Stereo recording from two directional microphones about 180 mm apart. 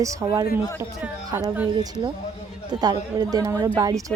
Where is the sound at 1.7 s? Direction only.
25° right (ahead or behind).